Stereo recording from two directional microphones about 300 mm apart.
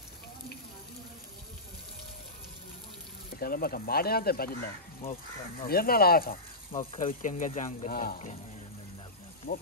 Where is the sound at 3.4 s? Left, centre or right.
Left.